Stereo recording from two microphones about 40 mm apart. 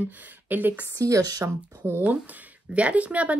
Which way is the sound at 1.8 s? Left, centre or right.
Right.